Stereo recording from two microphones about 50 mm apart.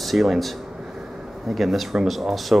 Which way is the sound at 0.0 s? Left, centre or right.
Centre.